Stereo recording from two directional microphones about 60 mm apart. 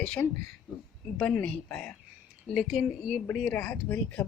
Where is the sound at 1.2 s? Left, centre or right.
Centre.